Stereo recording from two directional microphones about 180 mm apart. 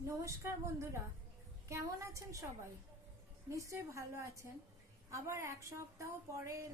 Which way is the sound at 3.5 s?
15° right (ahead or behind).